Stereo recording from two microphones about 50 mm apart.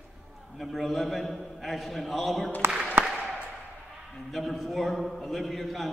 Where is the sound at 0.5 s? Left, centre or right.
Centre.